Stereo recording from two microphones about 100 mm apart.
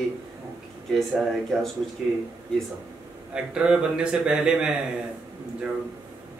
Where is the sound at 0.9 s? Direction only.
Centre (ahead or behind).